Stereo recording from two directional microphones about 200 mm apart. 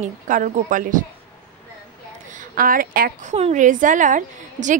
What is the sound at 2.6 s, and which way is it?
Speech, 45° right (ahead or behind).